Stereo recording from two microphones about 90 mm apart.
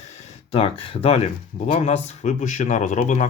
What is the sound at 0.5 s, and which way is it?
Speech, 90° left.